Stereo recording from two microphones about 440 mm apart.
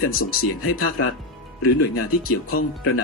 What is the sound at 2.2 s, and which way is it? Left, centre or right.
Speech, centre.